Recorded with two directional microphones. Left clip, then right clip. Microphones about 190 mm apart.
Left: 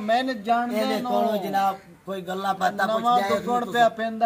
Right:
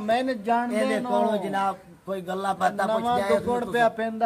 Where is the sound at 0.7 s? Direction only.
Centre (ahead or behind).